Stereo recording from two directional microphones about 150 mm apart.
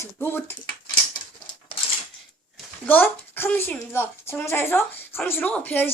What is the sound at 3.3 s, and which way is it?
A woman's voice, 15° left (ahead or behind).